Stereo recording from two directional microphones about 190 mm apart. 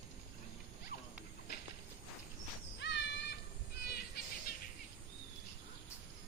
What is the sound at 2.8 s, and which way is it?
Music, 65° left (ahead or behind).